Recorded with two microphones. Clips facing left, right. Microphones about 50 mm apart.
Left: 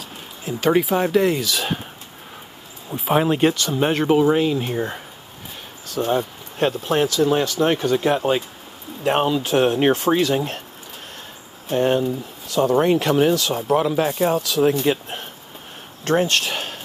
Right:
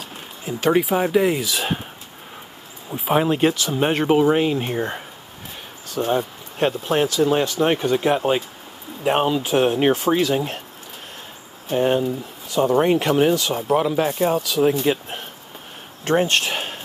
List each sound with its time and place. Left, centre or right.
0.5 s speech: centre
1.4 s speech: right
2.9 s speech: centre
3.5 s speech: centre
4.2 s speech: right
5.9 s speech: centre
11.7 s speech: centre
12.4 s speech: centre
13.7 s speech: centre
16.0 s speech: centre